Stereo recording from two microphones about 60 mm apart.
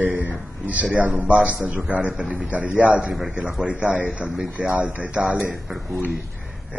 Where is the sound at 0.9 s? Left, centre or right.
Right.